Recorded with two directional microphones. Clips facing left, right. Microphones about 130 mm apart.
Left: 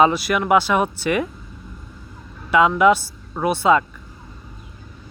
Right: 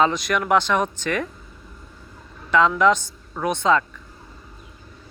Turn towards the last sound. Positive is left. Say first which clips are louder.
# left 3 dB
turn(degrees=10)  # may be behind; listen again after turning